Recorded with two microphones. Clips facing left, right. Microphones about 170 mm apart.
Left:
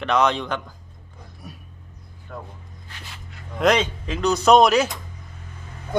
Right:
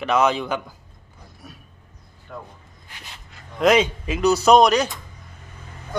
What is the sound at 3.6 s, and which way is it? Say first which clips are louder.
Speech: right 2 dB; 5° right (ahead or behind).